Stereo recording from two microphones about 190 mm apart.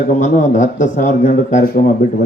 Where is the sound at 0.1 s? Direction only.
40° left (ahead or behind).